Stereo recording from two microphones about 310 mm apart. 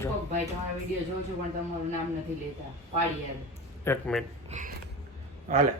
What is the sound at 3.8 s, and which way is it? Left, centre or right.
Speech, centre.